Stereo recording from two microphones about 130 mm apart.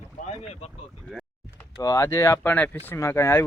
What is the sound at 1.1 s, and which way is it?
Speech, 5° right (ahead or behind).